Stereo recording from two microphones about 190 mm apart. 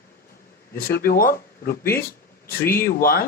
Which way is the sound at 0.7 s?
55° left (ahead or behind).